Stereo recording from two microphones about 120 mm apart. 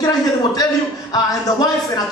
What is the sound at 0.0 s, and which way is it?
Speech, 30° left (ahead or behind).